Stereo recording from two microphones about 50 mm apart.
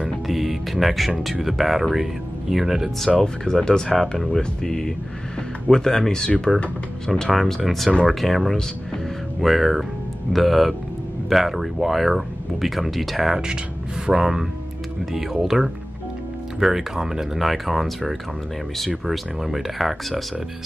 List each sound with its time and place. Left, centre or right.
0.3 s speech: centre
3.4 s speech: centre